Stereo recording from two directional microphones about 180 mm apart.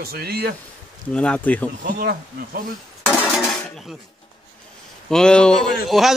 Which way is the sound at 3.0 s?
10° left (ahead or behind).